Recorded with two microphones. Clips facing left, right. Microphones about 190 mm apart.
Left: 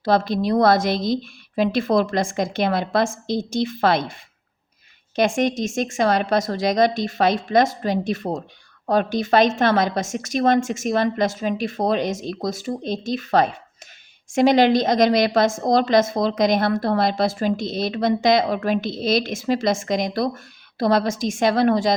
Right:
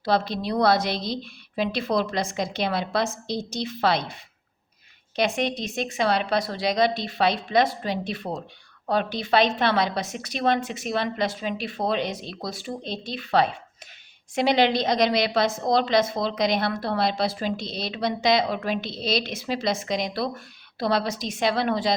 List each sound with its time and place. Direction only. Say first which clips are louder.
0.0 s a woman's voice: left 5 dB; 45° left (ahead or behind)